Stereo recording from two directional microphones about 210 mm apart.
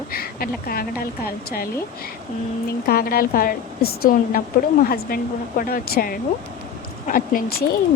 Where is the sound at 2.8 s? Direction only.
45° left (ahead or behind).